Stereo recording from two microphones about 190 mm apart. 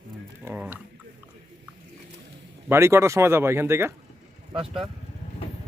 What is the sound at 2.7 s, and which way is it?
Speech, 15° right (ahead or behind).